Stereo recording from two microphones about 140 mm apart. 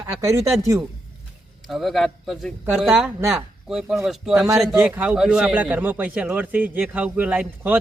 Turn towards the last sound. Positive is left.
turn(degrees=-10)  # may be behind; listen again after turning